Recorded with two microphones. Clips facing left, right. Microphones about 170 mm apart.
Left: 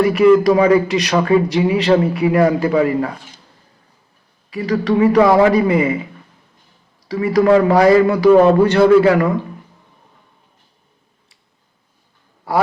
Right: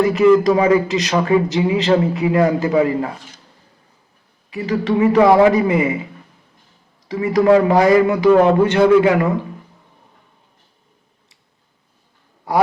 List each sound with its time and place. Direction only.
0.0 s speech: 20° right (ahead or behind)
4.5 s speech: 25° right (ahead or behind)
7.1 s speech: 20° right (ahead or behind)